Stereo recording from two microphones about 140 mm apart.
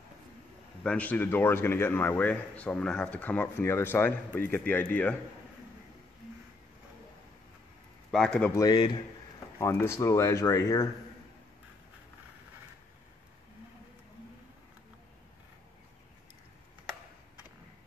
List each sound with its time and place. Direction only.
0.8 s speech: 10° left (ahead or behind)
8.1 s a man's voice: 5° left (ahead or behind)
8.5 s speech: 30° left (ahead or behind)
9.6 s speech: 20° left (ahead or behind)